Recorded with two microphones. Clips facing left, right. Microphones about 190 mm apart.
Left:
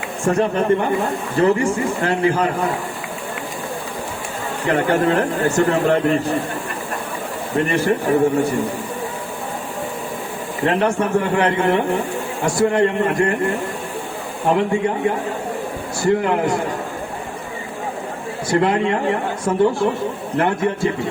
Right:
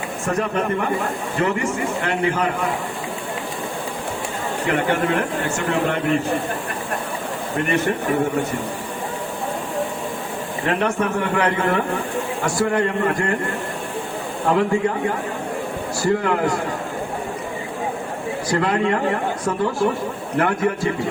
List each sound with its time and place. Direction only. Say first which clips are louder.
0.3 s speech: left 6 dB; 30° left (ahead or behind)
4.7 s speech: left 4 dB; 40° left (ahead or behind)
7.7 s speech: left 1 dB; 30° left (ahead or behind)
10.7 s a man's voice: left 3 dB; 30° left (ahead or behind)
14.4 s a man's voice: left 1 dB; 20° left (ahead or behind)
18.4 s a man's voice: left 3 dB; 25° left (ahead or behind)